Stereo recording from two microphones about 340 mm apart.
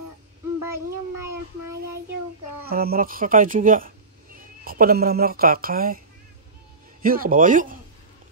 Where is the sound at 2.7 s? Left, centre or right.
Right.